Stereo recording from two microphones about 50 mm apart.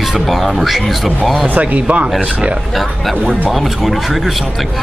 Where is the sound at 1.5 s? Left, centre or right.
Right.